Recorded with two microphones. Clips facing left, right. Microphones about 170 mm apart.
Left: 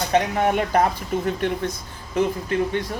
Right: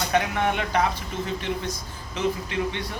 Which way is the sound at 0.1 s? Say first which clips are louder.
Left 5 dB; 35° left (ahead or behind).